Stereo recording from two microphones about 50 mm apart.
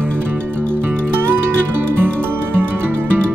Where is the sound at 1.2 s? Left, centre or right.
Right.